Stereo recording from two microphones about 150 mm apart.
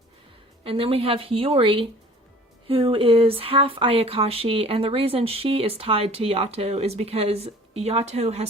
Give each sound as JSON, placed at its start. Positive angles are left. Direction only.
{"t": 0.6, "sound": "speech", "side_deg": -40}